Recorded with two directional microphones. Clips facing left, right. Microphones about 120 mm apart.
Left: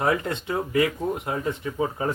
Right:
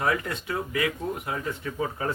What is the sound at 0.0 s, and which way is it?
Speech, 25° left (ahead or behind).